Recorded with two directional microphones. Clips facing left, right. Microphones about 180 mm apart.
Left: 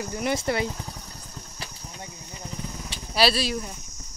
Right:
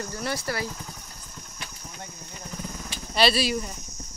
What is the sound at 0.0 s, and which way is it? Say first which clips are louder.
Speech: left 4 dB; 15° left (ahead or behind).